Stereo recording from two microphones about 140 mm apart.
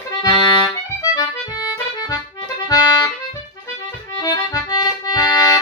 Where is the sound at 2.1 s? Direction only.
25° left (ahead or behind).